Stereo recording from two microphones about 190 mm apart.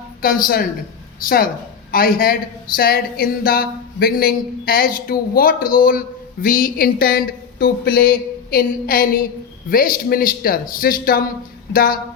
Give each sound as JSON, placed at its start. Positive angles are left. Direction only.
{"t": 0.2, "sound": "speech", "side_deg": 50}
{"t": 1.9, "sound": "speech", "side_deg": 50}